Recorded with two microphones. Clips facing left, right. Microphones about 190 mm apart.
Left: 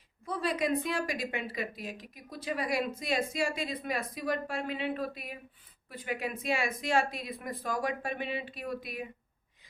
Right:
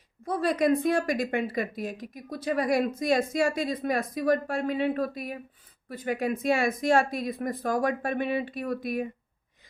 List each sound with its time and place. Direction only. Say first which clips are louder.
0.3 s a woman's voice: right 7 dB; 45° right (ahead or behind)